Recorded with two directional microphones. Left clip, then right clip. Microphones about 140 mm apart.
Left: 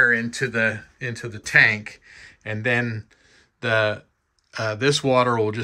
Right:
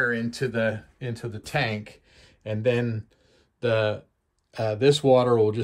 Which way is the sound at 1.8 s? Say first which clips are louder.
Left 5 dB; 15° right (ahead or behind).